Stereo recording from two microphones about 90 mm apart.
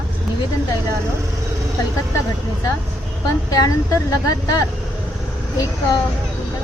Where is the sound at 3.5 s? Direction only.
40° left (ahead or behind).